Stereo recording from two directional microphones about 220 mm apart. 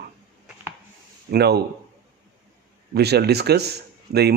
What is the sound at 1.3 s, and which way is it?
Speech, 45° right (ahead or behind).